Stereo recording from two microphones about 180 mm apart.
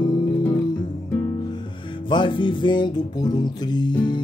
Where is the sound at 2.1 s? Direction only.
25° left (ahead or behind).